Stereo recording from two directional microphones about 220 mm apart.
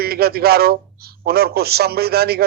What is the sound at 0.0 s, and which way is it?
A man's voice, 45° right (ahead or behind).